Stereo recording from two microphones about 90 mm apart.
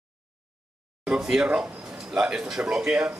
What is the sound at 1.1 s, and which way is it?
A man's voice, 5° right (ahead or behind).